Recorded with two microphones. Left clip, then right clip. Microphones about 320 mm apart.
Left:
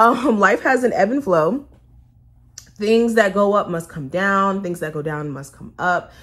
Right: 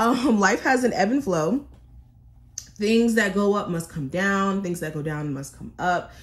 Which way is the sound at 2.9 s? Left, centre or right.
Centre.